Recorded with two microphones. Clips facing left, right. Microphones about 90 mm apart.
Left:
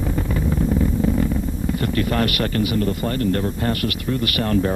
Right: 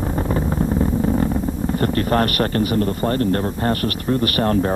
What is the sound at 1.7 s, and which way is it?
A man's voice, 40° right (ahead or behind).